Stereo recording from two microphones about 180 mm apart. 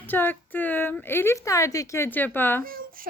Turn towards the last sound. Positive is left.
turn(degrees=-55)  # may be behind; listen again after turning